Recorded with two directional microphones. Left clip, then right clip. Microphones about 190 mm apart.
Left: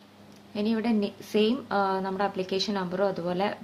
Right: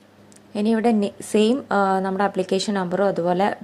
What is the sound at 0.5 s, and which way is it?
A woman's voice, 40° right (ahead or behind).